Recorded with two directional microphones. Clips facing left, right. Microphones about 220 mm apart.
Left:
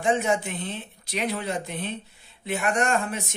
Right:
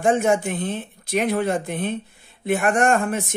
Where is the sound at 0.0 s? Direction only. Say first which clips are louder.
Right 5 dB; 50° right (ahead or behind).